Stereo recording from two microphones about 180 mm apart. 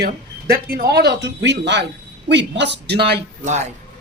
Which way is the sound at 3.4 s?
40° right (ahead or behind).